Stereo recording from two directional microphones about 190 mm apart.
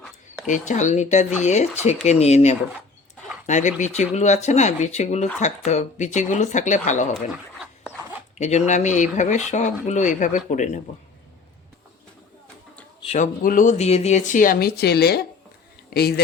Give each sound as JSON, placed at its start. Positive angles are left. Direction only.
{"t": 0.4, "sound": "speech", "side_deg": 40}
{"t": 8.4, "sound": "speech", "side_deg": 35}
{"t": 13.0, "sound": "a man's voice", "side_deg": 35}